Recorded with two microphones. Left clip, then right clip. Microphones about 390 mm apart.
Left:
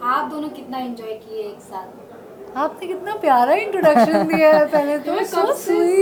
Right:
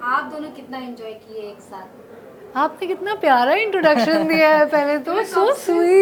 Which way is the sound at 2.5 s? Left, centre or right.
Right.